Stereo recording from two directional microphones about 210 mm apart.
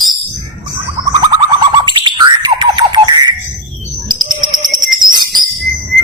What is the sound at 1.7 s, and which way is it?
Bird, 20° right (ahead or behind).